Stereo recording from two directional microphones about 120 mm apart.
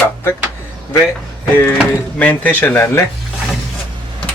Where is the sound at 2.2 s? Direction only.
15° left (ahead or behind).